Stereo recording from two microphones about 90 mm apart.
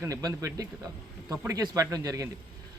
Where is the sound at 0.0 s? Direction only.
40° right (ahead or behind).